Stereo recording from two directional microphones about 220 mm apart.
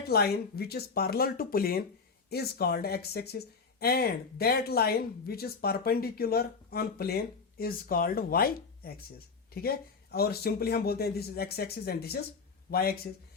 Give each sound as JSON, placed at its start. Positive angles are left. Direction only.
{"t": 0.1, "sound": "speech", "side_deg": 45}